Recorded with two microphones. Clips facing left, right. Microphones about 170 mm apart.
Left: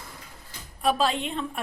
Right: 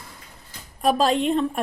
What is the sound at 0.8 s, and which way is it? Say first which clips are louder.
Speech: right 5 dB; 40° right (ahead or behind).